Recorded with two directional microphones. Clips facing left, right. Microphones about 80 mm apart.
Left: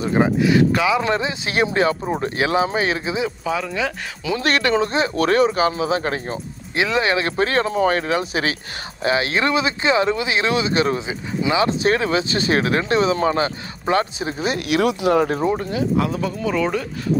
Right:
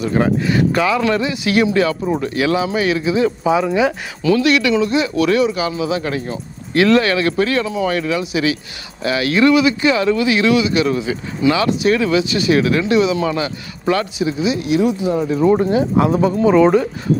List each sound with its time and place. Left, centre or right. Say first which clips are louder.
0.0 s speech: right 1 dB; left
0.4 s speech: even; centre
1.0 s speech: right 4 dB; left
3.4 s speech: right 9 dB; centre
4.4 s speech: right 1 dB; left
6.7 s speech: right 6 dB; left
11.1 s speech: right 5 dB; left
14.4 s speech: right 2 dB; left
15.5 s speech: right 6 dB; right